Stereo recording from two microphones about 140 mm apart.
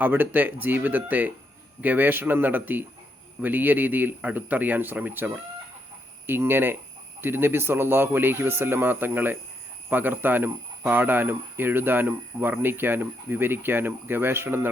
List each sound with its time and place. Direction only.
0.0 s speech: 10° right (ahead or behind)